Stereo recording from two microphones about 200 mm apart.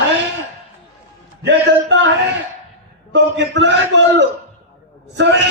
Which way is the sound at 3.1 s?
60° right (ahead or behind).